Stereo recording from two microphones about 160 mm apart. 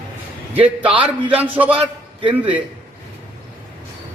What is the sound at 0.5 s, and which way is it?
A man's voice, 10° right (ahead or behind).